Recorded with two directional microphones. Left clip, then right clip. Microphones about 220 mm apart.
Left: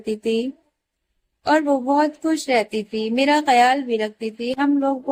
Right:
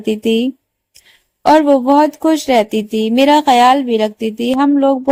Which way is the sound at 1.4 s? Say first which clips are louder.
Right 9 dB; 40° right (ahead or behind).